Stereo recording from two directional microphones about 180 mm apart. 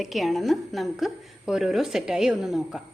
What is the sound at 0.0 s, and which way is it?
A woman's voice, centre (ahead or behind).